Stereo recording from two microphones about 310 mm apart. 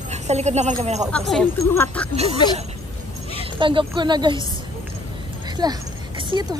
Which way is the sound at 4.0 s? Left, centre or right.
Centre.